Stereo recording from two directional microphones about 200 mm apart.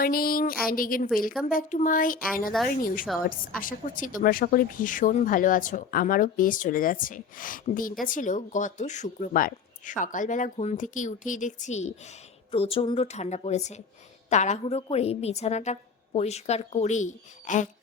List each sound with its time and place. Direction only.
0.0 s speech: 45° left (ahead or behind)